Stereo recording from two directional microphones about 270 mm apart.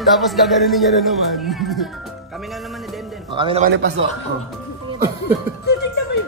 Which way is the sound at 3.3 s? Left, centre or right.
Centre.